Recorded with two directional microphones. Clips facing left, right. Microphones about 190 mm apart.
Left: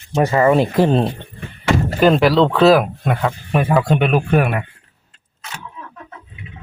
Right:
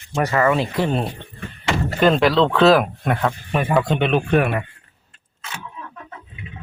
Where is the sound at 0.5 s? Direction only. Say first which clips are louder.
Left 6 dB; 45° left (ahead or behind).